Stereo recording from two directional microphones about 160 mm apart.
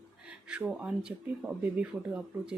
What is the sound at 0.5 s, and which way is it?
Speech, 5° right (ahead or behind).